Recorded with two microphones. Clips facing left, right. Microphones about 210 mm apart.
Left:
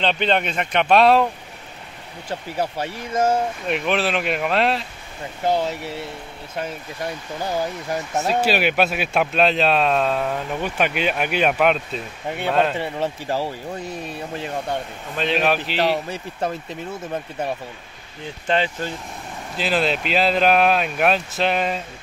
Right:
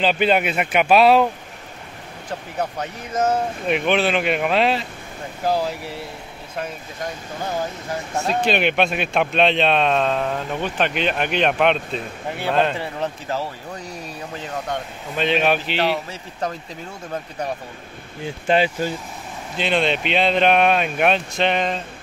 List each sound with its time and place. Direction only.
0.0 s speech: 5° right (ahead or behind)
2.2 s speech: 30° left (ahead or behind)
3.6 s a man's voice: centre (ahead or behind)
8.3 s a man's voice: 5° left (ahead or behind)
15.1 s a man's voice: centre (ahead or behind)
18.5 s speech: 10° right (ahead or behind)
19.5 s a man's voice: 5° left (ahead or behind)